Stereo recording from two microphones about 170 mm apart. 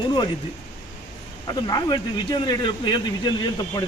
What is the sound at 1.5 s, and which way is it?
A man's voice, 25° left (ahead or behind).